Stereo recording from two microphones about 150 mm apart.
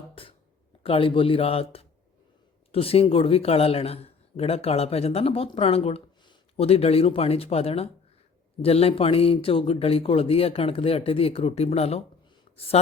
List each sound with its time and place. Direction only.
0.2 s a sound: 40° left (ahead or behind)
0.8 s a man's voice: 40° left (ahead or behind)
2.7 s a man's voice: 40° left (ahead or behind)